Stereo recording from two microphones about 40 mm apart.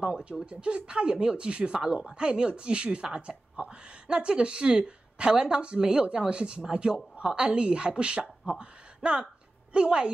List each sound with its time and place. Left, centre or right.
0.0 s speech: right